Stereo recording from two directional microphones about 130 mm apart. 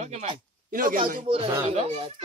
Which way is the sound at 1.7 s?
55° right (ahead or behind).